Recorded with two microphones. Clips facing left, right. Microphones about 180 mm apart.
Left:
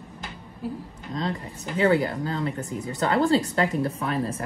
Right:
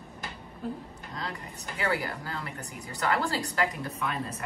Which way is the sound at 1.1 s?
25° left (ahead or behind).